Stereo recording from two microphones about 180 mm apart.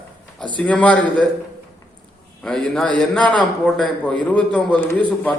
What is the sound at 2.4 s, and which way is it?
A man's voice, centre (ahead or behind).